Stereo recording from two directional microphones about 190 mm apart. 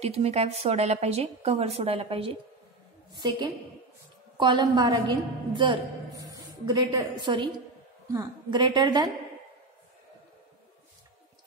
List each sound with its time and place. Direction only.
0.0 s a woman's voice: 35° right (ahead or behind)